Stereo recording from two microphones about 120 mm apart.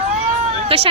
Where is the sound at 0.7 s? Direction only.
50° right (ahead or behind).